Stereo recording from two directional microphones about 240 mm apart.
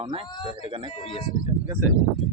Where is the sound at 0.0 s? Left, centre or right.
Right.